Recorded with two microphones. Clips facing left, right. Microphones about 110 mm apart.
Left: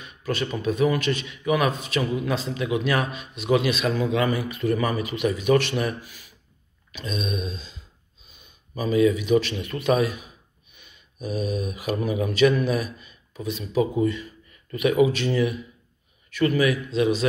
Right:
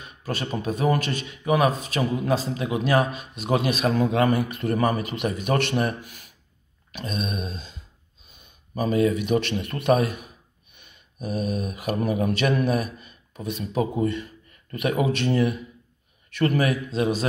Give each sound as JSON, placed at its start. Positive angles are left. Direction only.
{"t": 0.0, "sound": "speech", "side_deg": -40}
{"t": 5.9, "sound": "speech", "side_deg": -60}
{"t": 6.9, "sound": "speech", "side_deg": -45}